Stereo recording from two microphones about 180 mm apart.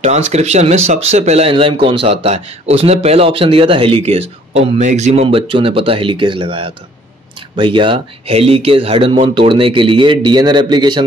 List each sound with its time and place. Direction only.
0.0 s speech: 40° right (ahead or behind)